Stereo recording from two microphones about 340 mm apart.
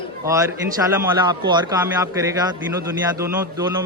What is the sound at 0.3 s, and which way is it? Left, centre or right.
Speech, centre.